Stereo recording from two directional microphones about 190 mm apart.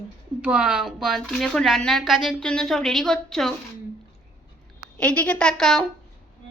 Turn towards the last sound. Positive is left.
turn(degrees=0)  # may be behind; listen again after turning